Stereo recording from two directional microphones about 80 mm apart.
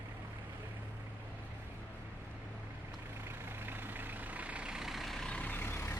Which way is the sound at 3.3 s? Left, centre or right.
Right.